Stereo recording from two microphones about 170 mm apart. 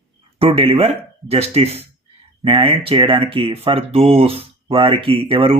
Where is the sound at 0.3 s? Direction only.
30° right (ahead or behind).